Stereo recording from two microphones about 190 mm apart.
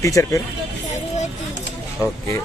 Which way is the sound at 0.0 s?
15° left (ahead or behind).